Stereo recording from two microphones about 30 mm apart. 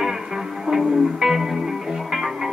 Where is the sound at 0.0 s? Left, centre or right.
Centre.